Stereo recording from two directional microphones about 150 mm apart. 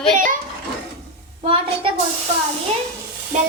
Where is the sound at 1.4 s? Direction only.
35° right (ahead or behind).